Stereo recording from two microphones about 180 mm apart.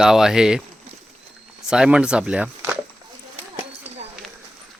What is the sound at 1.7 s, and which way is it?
Speech, 5° right (ahead or behind).